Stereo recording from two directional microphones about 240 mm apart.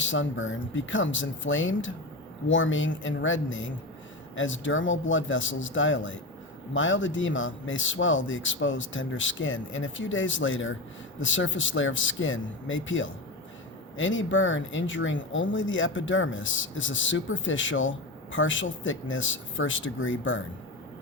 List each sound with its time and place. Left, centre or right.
0.0 s speech: left